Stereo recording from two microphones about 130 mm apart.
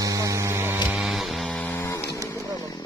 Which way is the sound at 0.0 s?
25° right (ahead or behind).